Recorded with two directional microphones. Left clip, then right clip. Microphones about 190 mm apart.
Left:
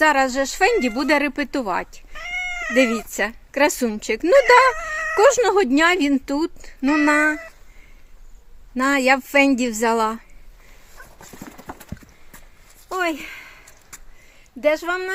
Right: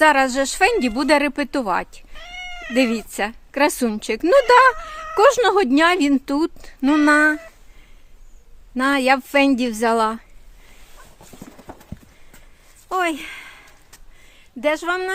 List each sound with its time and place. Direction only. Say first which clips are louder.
0.0 s speech: right 2 dB; 5° right (ahead or behind)
2.1 s cat: left 7 dB; 15° left (ahead or behind)
2.7 s a woman's voice: left 1 dB; centre (ahead or behind)
8.7 s a woman's voice: even; centre (ahead or behind)
12.9 s a sound: right 2 dB; centre (ahead or behind)
14.6 s a woman's voice: even; centre (ahead or behind)